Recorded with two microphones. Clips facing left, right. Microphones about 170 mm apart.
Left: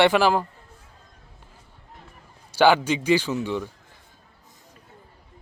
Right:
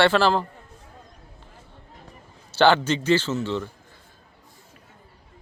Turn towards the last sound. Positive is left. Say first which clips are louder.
# even
turn(degrees=15)  # may be behind; listen again after turning